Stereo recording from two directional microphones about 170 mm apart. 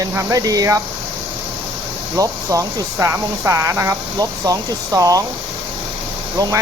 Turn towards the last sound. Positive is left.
turn(degrees=-20)  # may be behind; listen again after turning